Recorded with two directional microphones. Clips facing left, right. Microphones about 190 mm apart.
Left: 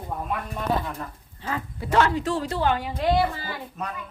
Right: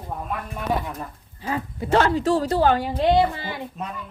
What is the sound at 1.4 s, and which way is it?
Speech, 15° right (ahead or behind).